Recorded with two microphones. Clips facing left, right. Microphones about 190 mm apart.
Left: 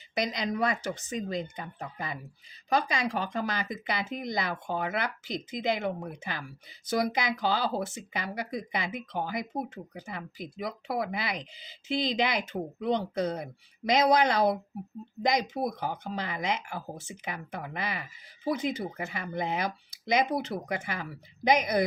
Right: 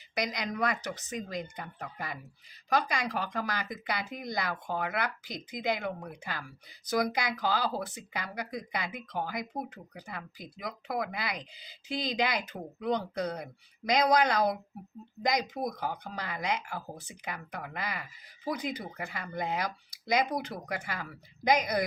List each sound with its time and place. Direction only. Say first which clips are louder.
0.1 s speech: left 3 dB; 25° left (ahead or behind)